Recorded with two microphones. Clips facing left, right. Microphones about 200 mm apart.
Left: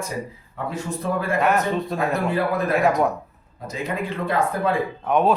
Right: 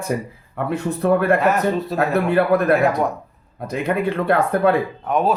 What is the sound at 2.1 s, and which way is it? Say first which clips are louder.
Speech: right 8 dB; 60° right (ahead or behind).